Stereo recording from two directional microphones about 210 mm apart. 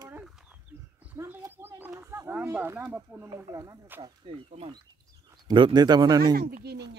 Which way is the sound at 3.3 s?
20° right (ahead or behind).